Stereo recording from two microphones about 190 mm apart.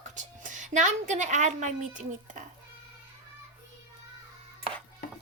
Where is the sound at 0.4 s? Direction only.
40° right (ahead or behind).